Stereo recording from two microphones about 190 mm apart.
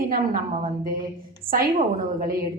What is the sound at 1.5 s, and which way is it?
Speech, 50° right (ahead or behind).